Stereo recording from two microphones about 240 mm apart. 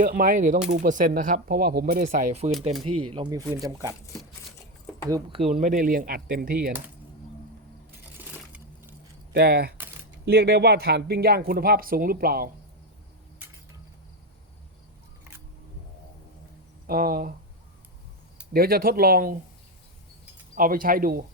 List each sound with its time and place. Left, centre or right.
0.0 s speech: right
3.1 s speech: centre
5.0 s speech: centre; by 6.7 s right
8.2 s coin: centre
9.3 s speech: right
9.7 s typing: centre
10.2 s speech: right
16.8 s speech: right
18.5 s speech: right
20.6 s speech: right